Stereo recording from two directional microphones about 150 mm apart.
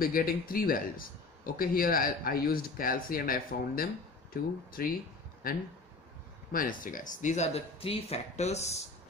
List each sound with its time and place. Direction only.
0.0 s a man's voice: 75° left (ahead or behind); by 8.7 s 45° left (ahead or behind)